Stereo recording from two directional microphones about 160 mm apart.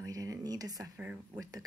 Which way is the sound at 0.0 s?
20° right (ahead or behind).